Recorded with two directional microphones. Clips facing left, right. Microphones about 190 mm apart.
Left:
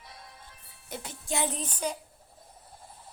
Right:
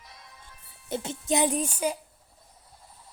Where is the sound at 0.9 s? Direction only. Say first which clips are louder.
Right 8 dB; 25° right (ahead or behind).